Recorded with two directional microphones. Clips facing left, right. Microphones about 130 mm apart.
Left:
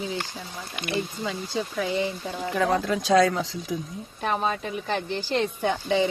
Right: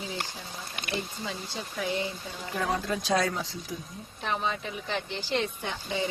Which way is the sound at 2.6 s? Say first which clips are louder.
Left 5 dB; 90° left.